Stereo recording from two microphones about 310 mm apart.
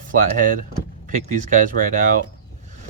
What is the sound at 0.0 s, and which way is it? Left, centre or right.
Speech, right.